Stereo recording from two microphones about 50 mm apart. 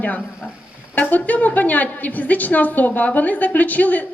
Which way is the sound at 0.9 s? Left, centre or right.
Left.